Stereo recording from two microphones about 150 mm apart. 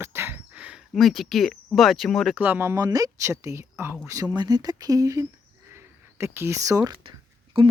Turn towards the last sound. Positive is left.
turn(degrees=-35)  # may be behind; listen again after turning